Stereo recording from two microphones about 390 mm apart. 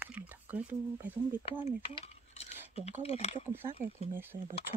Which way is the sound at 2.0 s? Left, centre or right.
Centre.